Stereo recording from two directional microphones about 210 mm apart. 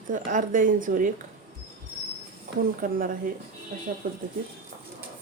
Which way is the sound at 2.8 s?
40° right (ahead or behind).